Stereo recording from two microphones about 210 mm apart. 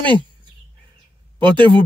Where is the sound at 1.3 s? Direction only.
20° right (ahead or behind).